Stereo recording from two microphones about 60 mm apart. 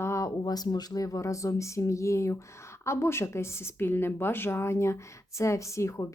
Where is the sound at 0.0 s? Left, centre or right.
Left.